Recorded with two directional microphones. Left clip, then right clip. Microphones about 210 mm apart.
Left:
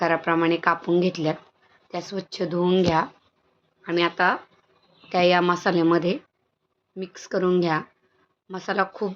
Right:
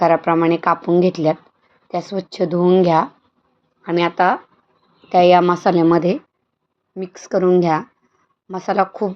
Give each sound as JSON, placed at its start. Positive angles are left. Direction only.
{"t": 0.0, "sound": "speech", "side_deg": -20}